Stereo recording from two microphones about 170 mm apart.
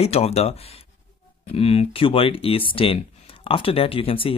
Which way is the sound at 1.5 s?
35° left (ahead or behind).